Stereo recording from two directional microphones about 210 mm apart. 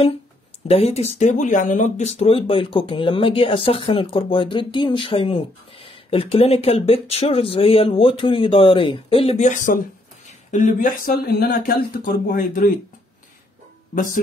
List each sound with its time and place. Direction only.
0.7 s speech: 30° left (ahead or behind)